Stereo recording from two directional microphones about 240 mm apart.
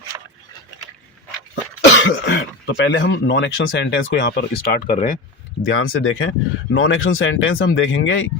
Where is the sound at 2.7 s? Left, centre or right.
Left.